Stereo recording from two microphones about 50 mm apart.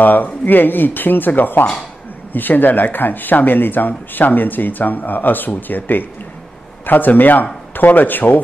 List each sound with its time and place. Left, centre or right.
0.0 s speech: left